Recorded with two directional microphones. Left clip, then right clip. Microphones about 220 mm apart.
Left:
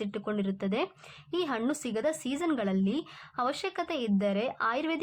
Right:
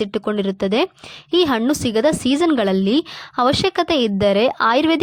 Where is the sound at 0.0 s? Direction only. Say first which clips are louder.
Right 13 dB; 30° right (ahead or behind).